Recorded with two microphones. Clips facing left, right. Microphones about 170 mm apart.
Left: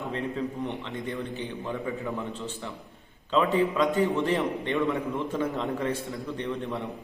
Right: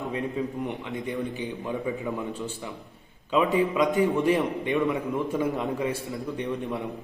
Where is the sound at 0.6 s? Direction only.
15° right (ahead or behind).